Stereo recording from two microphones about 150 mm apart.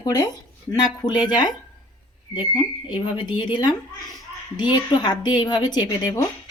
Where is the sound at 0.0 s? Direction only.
25° left (ahead or behind).